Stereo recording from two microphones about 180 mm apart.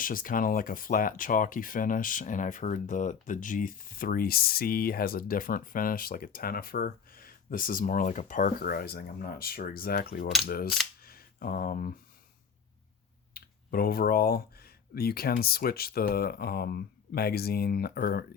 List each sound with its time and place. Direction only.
0.0 s speech: 50° left (ahead or behind)
10.4 s mechanisms: 55° left (ahead or behind)
11.0 s a sound: 55° left (ahead or behind)
13.3 s speech: 55° left (ahead or behind)